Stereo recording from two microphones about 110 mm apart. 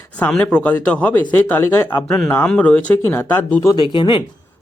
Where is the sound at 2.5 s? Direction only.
10° left (ahead or behind).